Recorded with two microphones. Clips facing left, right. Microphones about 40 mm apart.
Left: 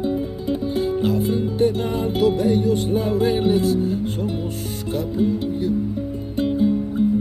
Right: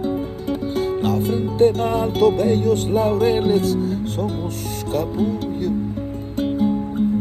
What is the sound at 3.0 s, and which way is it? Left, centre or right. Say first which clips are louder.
Music: right 3 dB; right.